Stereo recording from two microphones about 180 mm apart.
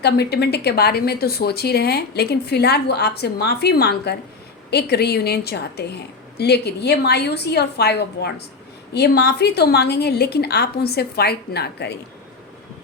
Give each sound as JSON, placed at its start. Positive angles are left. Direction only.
{"t": 0.0, "sound": "a woman's voice", "side_deg": 65}